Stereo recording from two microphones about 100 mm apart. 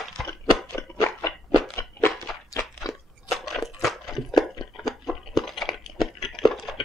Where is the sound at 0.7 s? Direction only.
30° left (ahead or behind).